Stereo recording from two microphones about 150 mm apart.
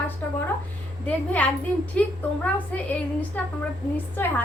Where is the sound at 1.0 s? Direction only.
10° left (ahead or behind).